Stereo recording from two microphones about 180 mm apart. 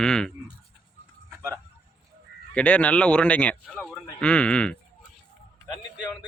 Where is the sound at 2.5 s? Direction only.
5° left (ahead or behind).